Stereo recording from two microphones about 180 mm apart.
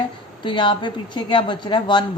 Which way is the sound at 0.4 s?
25° left (ahead or behind).